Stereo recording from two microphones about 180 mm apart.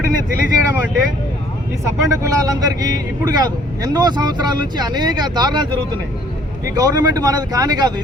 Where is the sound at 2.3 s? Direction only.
20° right (ahead or behind).